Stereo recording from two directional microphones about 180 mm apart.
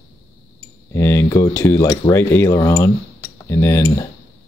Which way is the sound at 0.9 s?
15° left (ahead or behind).